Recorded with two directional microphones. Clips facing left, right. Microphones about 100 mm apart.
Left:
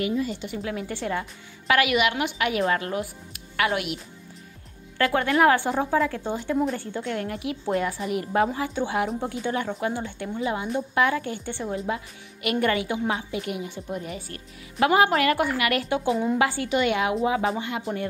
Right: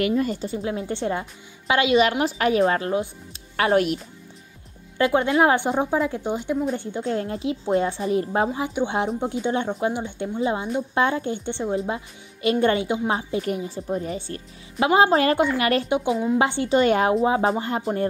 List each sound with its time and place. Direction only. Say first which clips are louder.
0.0 s speech: right 4 dB; 55° right (ahead or behind)
0.5 s a woman's voice: right 4 dB; 30° right (ahead or behind)
2.0 s a woman's voice: right 4 dB; 35° right (ahead or behind)
4.9 s a woman's voice: right 3 dB; 20° right (ahead or behind)
13.1 s a woman's voice: right 4 dB; 35° right (ahead or behind)